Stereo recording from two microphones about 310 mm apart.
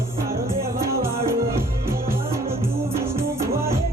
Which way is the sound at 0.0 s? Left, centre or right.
Centre.